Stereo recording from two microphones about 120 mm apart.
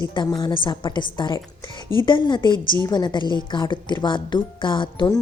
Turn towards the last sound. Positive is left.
turn(degrees=40)  # may be behind; listen again after turning